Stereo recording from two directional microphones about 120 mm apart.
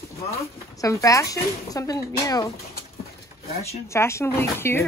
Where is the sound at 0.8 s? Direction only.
25° left (ahead or behind).